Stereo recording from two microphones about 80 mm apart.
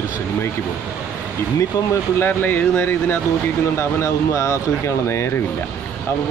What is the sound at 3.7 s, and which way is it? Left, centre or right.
Speech, left.